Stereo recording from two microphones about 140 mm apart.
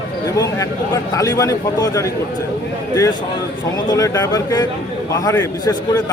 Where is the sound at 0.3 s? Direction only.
25° left (ahead or behind).